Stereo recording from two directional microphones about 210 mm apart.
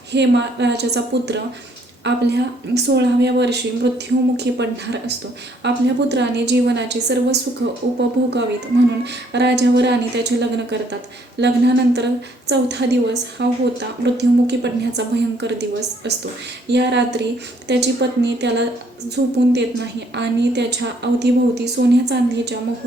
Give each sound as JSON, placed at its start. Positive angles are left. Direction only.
{"t": 0.1, "sound": "a woman's voice", "side_deg": -55}